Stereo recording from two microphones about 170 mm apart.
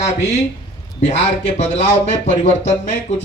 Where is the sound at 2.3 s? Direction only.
40° left (ahead or behind).